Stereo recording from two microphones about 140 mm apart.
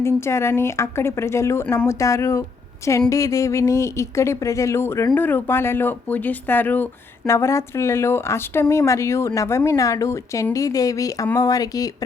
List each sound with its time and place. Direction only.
0.0 s a woman's voice: 20° left (ahead or behind)